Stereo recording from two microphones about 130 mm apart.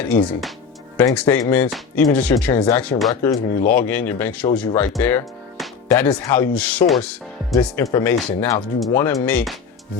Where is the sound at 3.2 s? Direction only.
20° left (ahead or behind).